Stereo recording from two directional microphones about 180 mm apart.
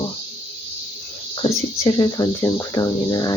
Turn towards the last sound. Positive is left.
turn(degrees=20)  # may be behind; listen again after turning